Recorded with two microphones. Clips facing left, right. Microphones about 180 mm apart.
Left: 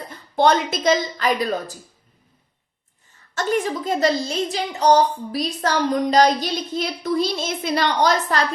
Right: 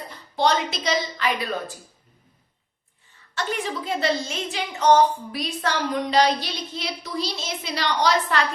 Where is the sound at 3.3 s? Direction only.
45° left (ahead or behind).